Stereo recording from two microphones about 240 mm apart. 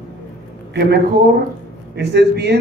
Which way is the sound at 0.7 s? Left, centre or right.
Right.